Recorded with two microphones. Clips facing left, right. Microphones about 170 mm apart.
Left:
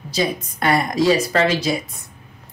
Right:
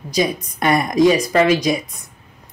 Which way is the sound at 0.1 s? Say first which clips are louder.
Right 2 dB; 20° right (ahead or behind).